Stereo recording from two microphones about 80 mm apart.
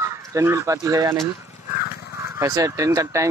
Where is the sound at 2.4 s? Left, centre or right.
Right.